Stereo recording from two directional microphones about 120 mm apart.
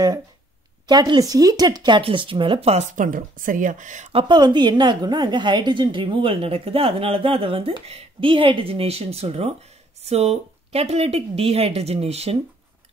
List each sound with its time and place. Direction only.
0.8 s a woman's voice: 35° right (ahead or behind); by 4.1 s 90° right
4.1 s a woman's voice: 45° right (ahead or behind)